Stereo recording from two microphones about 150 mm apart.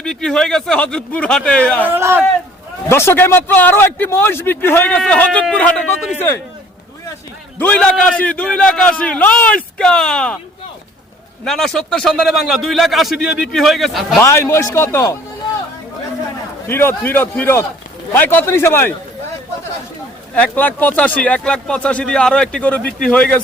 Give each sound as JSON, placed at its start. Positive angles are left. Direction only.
{"t": 0.0, "sound": "a man's voice", "side_deg": 5}
{"t": 1.9, "sound": "speech", "side_deg": -15}
{"t": 2.9, "sound": "speech", "side_deg": 15}
{"t": 7.6, "sound": "speech", "side_deg": 10}
{"t": 11.4, "sound": "a man's voice", "side_deg": 5}
{"t": 14.2, "sound": "speech", "side_deg": 15}
{"t": 16.6, "sound": "speech", "side_deg": 15}
{"t": 20.3, "sound": "speech", "side_deg": 10}